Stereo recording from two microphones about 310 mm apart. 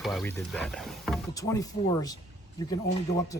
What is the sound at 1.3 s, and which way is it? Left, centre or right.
Speech, centre.